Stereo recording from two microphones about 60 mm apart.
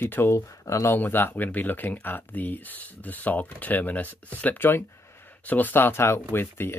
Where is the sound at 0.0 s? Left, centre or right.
Left.